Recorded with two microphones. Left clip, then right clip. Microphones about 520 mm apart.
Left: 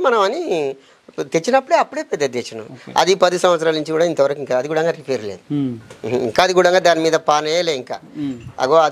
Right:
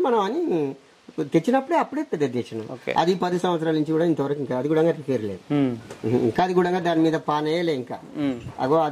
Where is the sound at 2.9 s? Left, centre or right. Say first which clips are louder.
Left 8 dB; left.